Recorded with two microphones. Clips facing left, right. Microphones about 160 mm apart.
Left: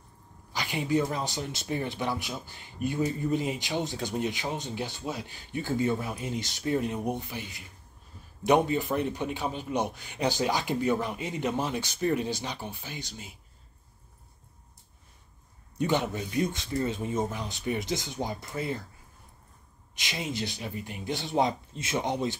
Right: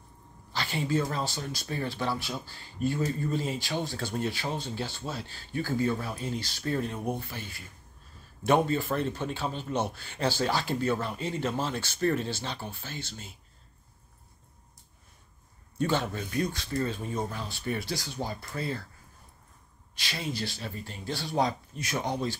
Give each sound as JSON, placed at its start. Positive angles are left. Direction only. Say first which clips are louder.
{"t": 0.5, "sound": "speech", "louder": "left 1 dB", "side_deg": 15}
{"t": 15.8, "sound": "speech", "louder": "left 1 dB", "side_deg": 15}
{"t": 20.0, "sound": "speech", "louder": "left 1 dB", "side_deg": 20}